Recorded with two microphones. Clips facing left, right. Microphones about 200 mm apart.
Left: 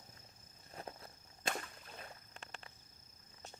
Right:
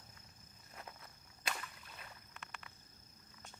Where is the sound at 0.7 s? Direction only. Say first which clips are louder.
Left 5 dB; 35° left (ahead or behind).